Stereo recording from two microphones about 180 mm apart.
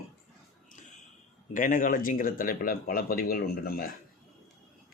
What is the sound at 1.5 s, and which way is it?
Speech, 45° left (ahead or behind).